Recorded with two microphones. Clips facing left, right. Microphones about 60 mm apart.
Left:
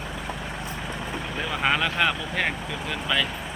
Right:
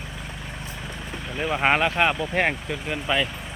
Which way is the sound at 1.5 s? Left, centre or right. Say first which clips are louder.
Right 4 dB; right.